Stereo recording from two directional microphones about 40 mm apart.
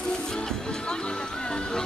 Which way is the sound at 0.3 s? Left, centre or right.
Centre.